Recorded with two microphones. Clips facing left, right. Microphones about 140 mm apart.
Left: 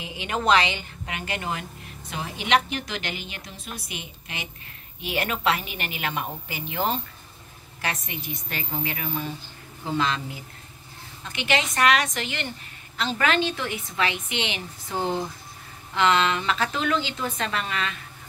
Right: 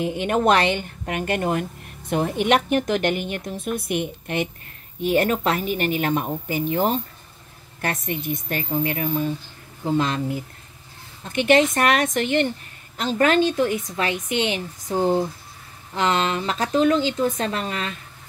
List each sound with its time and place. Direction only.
0.0 s a woman's voice: 50° right (ahead or behind)
5.0 s a woman's voice: 45° right (ahead or behind)